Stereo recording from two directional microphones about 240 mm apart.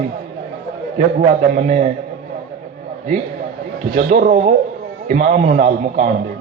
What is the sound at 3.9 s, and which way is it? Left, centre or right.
A man's voice, right.